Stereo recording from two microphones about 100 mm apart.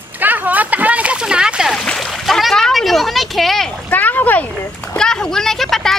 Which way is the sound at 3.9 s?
15° left (ahead or behind).